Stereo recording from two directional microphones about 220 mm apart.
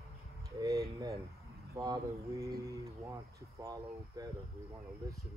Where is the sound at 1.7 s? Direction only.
15° right (ahead or behind).